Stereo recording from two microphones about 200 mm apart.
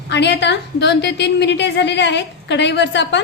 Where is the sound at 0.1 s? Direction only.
60° left (ahead or behind).